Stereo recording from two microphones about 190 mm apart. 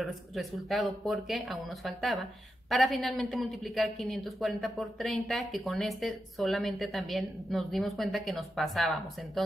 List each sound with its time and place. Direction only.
0.0 s a woman's voice: centre (ahead or behind)